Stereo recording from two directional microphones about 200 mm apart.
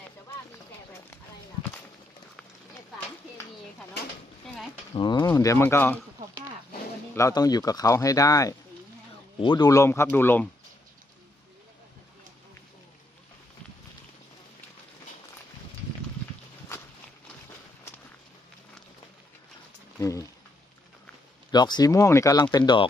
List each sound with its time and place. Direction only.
4.9 s speech: 25° left (ahead or behind)
7.1 s speech: 15° left (ahead or behind)
20.0 s a sound: 15° left (ahead or behind)
21.5 s speech: 20° left (ahead or behind)